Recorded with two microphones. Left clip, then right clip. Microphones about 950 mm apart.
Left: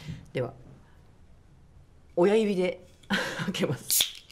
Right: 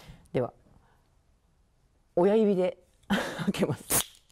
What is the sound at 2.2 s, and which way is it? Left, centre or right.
Speech, right.